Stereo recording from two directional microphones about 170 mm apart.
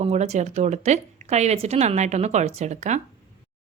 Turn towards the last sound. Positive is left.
turn(degrees=-45)  # may be behind; listen again after turning